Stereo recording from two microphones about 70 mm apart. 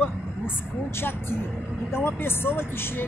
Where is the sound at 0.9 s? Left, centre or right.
Left.